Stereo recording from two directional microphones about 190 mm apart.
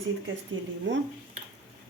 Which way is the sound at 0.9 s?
75° right (ahead or behind).